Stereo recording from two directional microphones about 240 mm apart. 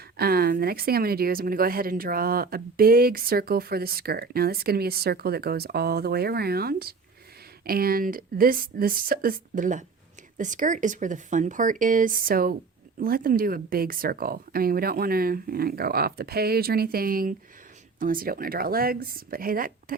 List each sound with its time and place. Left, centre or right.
0.2 s speech: right